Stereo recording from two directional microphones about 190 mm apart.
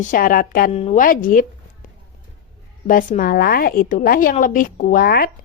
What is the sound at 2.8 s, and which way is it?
A woman's voice, 45° left (ahead or behind).